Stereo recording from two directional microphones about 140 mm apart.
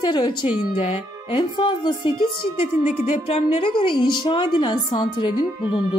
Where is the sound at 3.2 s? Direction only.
45° left (ahead or behind).